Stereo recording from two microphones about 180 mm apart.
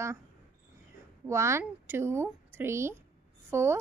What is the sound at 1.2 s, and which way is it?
Speech, 15° right (ahead or behind).